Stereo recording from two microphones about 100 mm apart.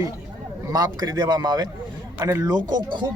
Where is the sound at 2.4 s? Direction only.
45° right (ahead or behind).